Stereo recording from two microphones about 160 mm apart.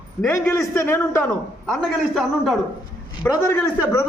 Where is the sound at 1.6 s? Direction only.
5° left (ahead or behind).